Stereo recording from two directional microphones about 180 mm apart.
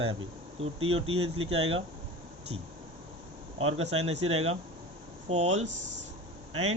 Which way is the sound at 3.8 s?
35° right (ahead or behind).